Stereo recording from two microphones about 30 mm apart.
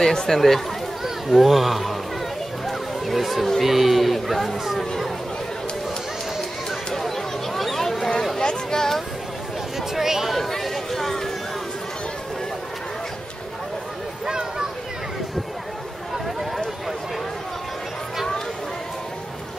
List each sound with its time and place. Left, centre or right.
0.0 s speech: centre
1.0 s speech: centre
2.6 s music: centre
3.6 s speech: centre
6.9 s chatter: centre
7.7 s a sound: centre
8.4 s chatter: left
9.8 s speech: centre
10.3 s chatter: centre